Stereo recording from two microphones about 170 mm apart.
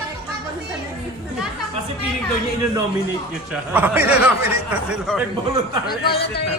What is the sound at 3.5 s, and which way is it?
Speech, 10° right (ahead or behind).